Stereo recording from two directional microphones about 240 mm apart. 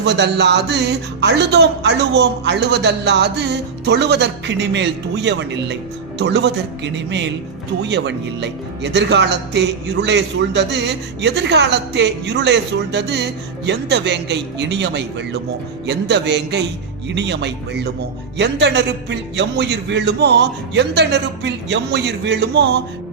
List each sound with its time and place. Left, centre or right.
0.0 s speech: right